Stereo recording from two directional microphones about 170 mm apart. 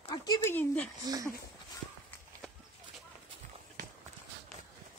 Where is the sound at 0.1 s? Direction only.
25° left (ahead or behind).